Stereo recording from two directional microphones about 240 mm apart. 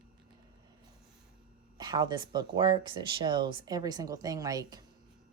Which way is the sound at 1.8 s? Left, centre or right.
Centre.